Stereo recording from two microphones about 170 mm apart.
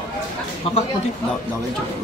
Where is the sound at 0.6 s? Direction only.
35° left (ahead or behind).